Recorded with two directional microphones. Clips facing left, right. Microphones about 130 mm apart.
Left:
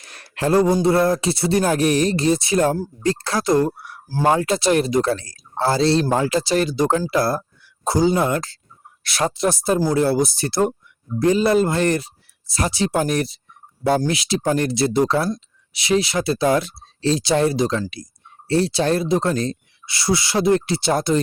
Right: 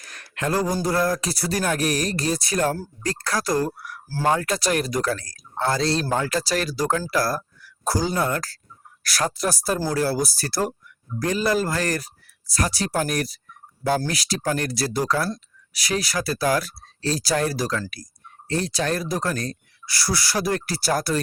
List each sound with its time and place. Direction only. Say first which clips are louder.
0.0 s speech: left 5 dB; 30° left (ahead or behind)